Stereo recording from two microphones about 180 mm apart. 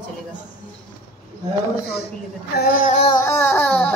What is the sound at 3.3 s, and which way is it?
Speech, 10° left (ahead or behind).